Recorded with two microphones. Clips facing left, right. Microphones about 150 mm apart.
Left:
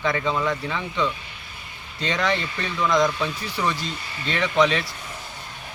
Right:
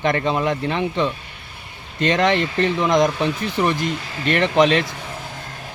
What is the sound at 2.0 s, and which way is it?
Speech, 60° right (ahead or behind).